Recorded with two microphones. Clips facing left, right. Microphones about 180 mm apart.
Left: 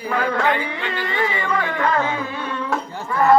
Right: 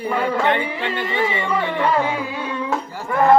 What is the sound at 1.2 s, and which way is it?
Speech, 25° right (ahead or behind).